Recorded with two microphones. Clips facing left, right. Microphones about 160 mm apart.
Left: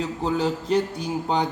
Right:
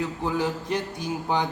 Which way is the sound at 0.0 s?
20° left (ahead or behind).